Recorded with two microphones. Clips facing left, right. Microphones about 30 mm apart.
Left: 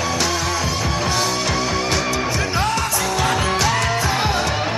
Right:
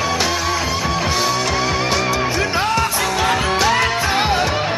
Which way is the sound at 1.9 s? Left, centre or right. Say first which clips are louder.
Right 2 dB; centre.